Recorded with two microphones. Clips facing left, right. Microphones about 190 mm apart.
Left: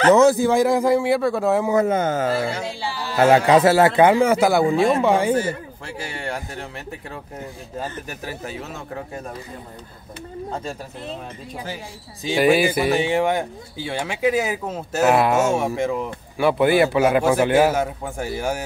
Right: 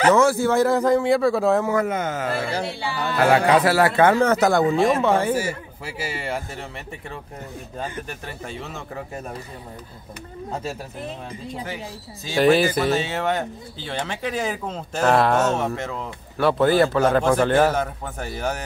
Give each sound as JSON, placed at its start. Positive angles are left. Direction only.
{"t": 0.1, "sound": "speech", "side_deg": 20}
{"t": 1.6, "sound": "speech", "side_deg": 20}
{"t": 1.9, "sound": "speech", "side_deg": 30}
{"t": 2.6, "sound": "music", "side_deg": -60}
{"t": 3.2, "sound": "speech", "side_deg": 25}
{"t": 5.3, "sound": "speech", "side_deg": -10}
{"t": 8.1, "sound": "speech", "side_deg": 5}
{"t": 10.5, "sound": "speech", "side_deg": -5}
{"t": 12.3, "sound": "speech", "side_deg": 10}